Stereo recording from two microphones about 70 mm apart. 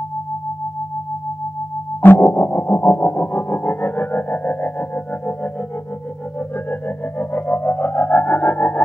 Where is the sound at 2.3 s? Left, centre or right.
Left.